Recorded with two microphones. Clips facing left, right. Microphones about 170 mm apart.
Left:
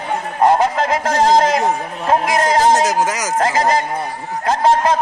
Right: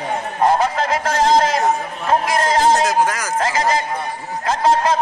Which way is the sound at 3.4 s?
35° left (ahead or behind).